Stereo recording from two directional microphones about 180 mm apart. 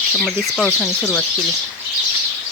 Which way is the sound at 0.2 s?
Centre (ahead or behind).